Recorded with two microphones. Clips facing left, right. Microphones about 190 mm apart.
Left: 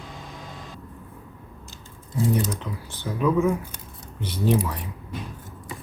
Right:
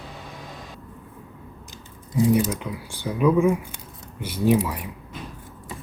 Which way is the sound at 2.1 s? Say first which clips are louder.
Right 4 dB; 15° right (ahead or behind).